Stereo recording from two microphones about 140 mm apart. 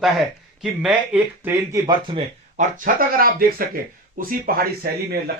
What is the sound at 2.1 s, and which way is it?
Speech, 35° right (ahead or behind).